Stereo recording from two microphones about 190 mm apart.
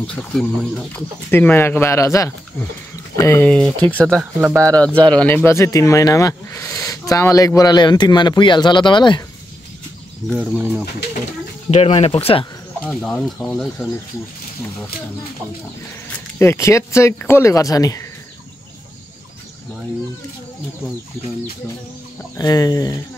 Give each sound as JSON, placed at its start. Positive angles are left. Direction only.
{"t": 0.0, "sound": "speech", "side_deg": 5}
{"t": 10.3, "sound": "speech", "side_deg": -5}
{"t": 11.7, "sound": "speech", "side_deg": 30}
{"t": 12.8, "sound": "speech", "side_deg": 5}
{"t": 16.3, "sound": "speech", "side_deg": 15}
{"t": 22.4, "sound": "speech", "side_deg": 20}